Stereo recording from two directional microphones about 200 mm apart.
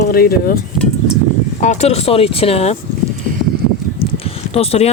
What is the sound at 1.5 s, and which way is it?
Speech, 35° left (ahead or behind).